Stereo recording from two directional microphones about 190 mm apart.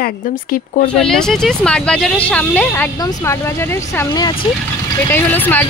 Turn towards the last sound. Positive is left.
turn(degrees=10)  # may be behind; listen again after turning